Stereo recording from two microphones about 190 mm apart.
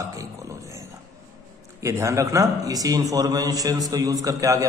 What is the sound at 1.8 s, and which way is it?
A man's voice, 15° right (ahead or behind).